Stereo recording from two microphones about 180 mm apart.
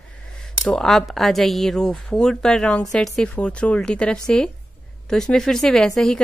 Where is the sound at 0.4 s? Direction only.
5° left (ahead or behind).